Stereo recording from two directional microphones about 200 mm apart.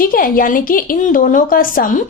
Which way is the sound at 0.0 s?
45° left (ahead or behind).